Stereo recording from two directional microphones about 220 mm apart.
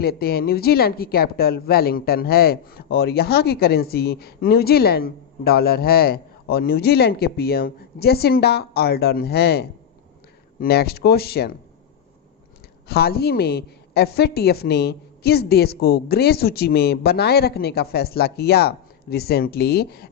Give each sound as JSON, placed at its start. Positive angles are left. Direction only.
{"t": 0.0, "sound": "a woman's voice", "side_deg": 45}
{"t": 12.9, "sound": "a woman's voice", "side_deg": 45}